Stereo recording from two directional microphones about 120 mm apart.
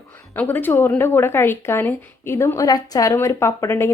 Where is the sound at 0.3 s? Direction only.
15° left (ahead or behind).